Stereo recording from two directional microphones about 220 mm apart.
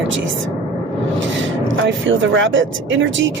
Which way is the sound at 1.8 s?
60° right (ahead or behind).